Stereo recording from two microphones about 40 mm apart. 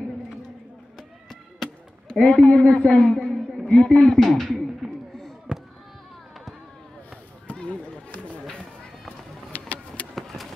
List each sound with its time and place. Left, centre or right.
0.9 s chop: centre
2.2 s a man's voice: left
4.2 s speech: centre
5.5 s a sound: centre
7.6 s run: left
9.5 s vehicle: left
10.1 s a sound: centre